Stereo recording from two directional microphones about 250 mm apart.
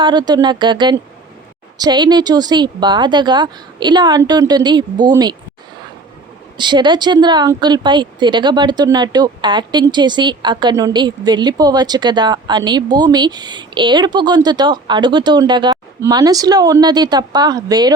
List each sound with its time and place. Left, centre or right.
0.0 s a woman's voice: centre
6.6 s a woman's voice: centre